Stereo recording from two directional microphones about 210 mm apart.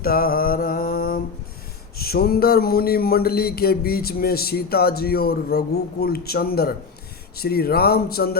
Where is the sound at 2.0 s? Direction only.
45° left (ahead or behind).